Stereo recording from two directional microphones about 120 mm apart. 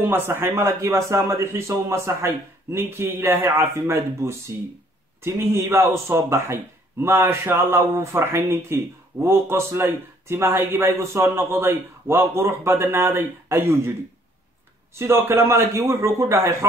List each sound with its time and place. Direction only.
0.0 s a man's voice: 20° right (ahead or behind)
15.0 s a man's voice: 20° right (ahead or behind)